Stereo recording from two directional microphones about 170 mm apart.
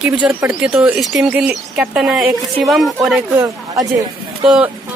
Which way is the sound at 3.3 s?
20° right (ahead or behind).